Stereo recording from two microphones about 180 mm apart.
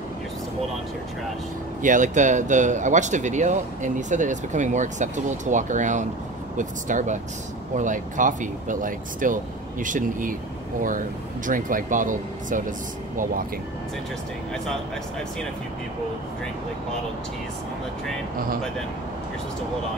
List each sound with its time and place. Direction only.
1.8 s speech: 45° right (ahead or behind)